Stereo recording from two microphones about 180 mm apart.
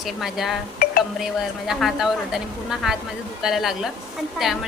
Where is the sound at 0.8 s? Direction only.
55° left (ahead or behind).